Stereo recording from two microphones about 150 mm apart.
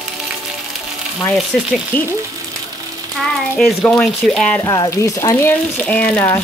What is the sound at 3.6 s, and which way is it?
Speech, 5° left (ahead or behind).